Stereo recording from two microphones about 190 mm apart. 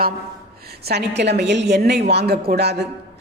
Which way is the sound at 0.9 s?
60° right (ahead or behind).